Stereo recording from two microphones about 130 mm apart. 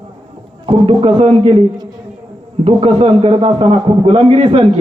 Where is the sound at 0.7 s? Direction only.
45° right (ahead or behind).